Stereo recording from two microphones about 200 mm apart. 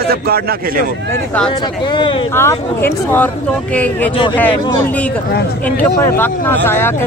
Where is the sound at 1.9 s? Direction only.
25° left (ahead or behind).